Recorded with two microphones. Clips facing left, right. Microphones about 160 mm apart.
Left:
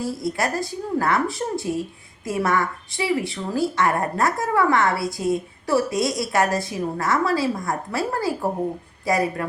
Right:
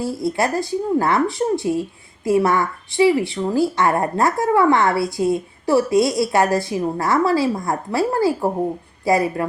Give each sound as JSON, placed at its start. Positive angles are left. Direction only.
{"t": 0.0, "sound": "speech", "side_deg": -25}